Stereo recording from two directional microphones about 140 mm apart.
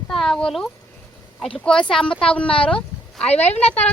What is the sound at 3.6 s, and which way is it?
Speech, 50° left (ahead or behind).